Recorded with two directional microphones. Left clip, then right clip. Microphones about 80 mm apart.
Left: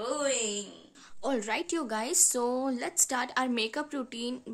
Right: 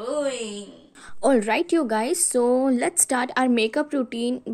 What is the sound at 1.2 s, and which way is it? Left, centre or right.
Speech, right.